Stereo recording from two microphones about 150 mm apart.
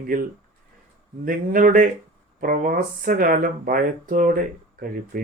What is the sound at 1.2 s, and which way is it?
Speech, 70° right (ahead or behind).